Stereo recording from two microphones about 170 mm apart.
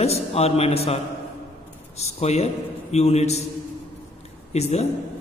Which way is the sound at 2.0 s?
40° left (ahead or behind).